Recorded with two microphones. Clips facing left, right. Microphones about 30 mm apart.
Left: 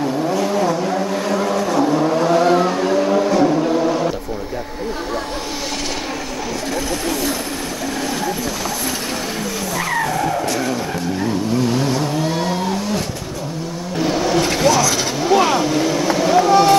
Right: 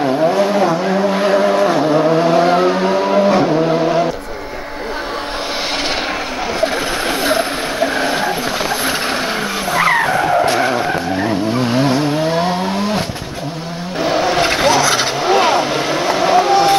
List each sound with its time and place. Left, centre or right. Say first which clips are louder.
0.0 s vehicle: right 5 dB; right
6.6 s vehicle: right 6 dB; right
14.0 s vehicle: right 3 dB; right